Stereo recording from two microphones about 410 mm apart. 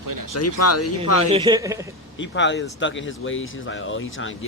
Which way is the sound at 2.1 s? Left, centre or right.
Left.